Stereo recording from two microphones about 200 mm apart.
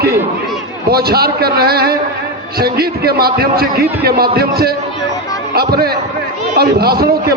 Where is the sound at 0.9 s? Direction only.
50° right (ahead or behind).